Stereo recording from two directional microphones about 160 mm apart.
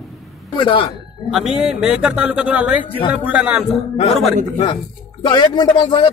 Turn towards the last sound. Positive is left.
turn(degrees=30)  # may be behind; listen again after turning